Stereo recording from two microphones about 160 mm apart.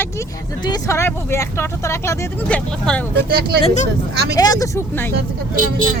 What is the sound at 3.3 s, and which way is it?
Speech, 80° right.